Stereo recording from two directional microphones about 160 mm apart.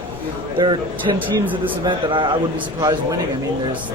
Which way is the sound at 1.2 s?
10° right (ahead or behind).